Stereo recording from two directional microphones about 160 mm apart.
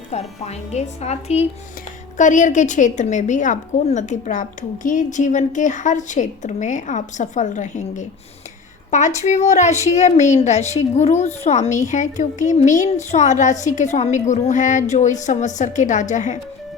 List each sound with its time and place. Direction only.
0.1 s a woman's voice: 45° left (ahead or behind)